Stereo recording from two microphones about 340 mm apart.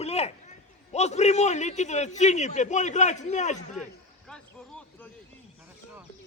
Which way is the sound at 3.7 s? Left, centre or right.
Centre.